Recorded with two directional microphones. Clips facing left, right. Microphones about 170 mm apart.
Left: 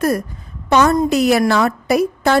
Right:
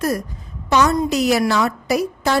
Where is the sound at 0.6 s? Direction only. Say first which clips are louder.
Left 3 dB; 55° left (ahead or behind).